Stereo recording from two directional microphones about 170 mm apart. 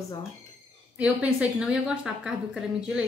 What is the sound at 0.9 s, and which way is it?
A woman's voice, 5° right (ahead or behind).